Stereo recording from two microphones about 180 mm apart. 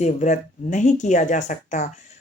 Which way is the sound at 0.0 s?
40° left (ahead or behind).